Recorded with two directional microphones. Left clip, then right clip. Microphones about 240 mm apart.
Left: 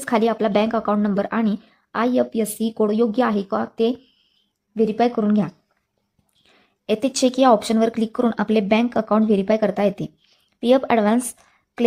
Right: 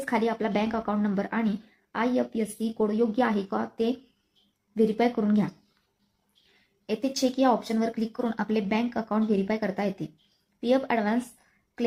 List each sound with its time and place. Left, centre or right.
0.0 s a woman's voice: left
6.8 s a woman's voice: left